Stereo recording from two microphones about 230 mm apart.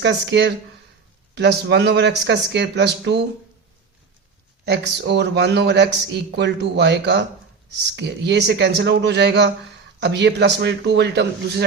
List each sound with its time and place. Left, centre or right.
0.0 s speech: right
4.6 s speech: right